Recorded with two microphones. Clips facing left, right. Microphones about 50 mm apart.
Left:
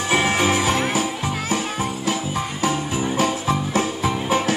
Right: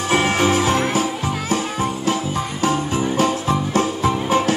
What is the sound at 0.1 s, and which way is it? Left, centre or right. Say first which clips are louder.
Music: right 2 dB; centre.